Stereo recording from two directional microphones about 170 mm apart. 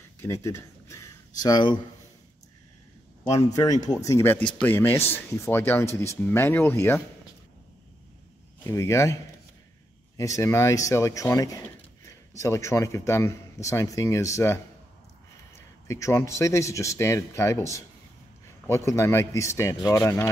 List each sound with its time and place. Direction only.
0.2 s speech: 15° left (ahead or behind)
4.0 s a man's voice: 15° left (ahead or behind)
8.6 s a man's voice: 15° left (ahead or behind)
15.9 s a man's voice: 15° left (ahead or behind)